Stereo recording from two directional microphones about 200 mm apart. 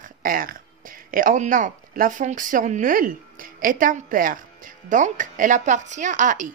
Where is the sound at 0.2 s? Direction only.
45° right (ahead or behind).